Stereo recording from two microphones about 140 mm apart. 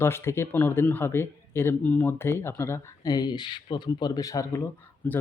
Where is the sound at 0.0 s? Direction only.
20° left (ahead or behind).